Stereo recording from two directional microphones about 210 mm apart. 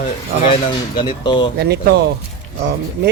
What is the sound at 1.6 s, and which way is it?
Speech, 50° right (ahead or behind).